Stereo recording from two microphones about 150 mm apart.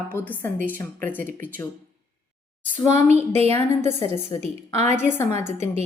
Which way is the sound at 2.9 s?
45° right (ahead or behind).